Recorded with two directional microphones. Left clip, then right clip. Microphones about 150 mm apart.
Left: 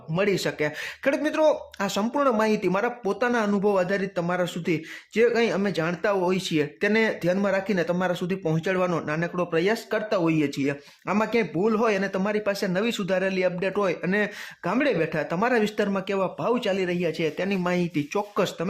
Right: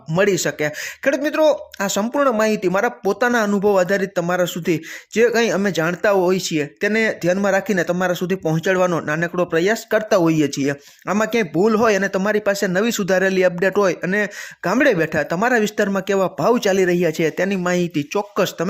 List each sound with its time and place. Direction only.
0.1 s speech: 30° right (ahead or behind)